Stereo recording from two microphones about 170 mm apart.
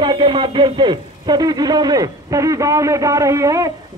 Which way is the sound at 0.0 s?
25° right (ahead or behind).